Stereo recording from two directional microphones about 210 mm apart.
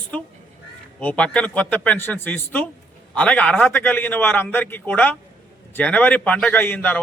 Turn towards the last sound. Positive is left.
turn(degrees=10)  # may be behind; listen again after turning